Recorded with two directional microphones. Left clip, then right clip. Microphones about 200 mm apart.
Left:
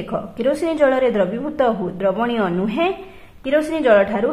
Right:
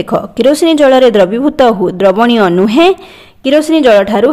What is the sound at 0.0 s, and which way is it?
Speech, 50° right (ahead or behind).